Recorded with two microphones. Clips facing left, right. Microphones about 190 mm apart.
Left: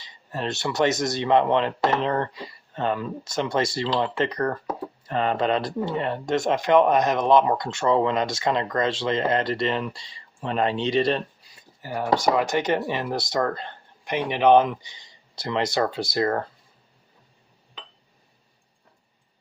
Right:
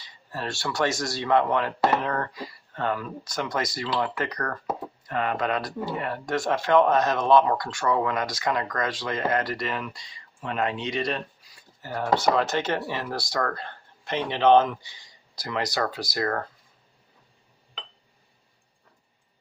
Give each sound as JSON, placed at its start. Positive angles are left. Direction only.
{"t": 0.0, "sound": "speech", "side_deg": 20}
{"t": 11.8, "sound": "speech", "side_deg": 15}